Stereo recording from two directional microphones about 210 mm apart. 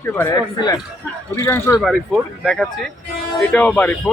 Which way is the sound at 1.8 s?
Centre (ahead or behind).